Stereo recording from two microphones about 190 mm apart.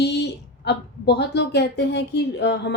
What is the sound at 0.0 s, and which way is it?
A woman's voice, 60° left (ahead or behind).